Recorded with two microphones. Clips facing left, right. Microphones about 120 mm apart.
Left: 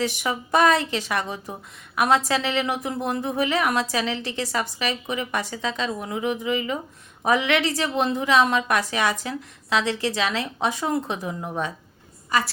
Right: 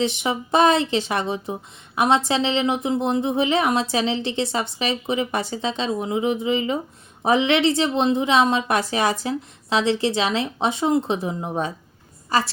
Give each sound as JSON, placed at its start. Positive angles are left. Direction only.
{"t": 0.0, "sound": "a woman's voice", "side_deg": -25}